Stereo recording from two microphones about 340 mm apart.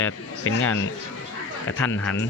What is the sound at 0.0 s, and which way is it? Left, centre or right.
Speech, left.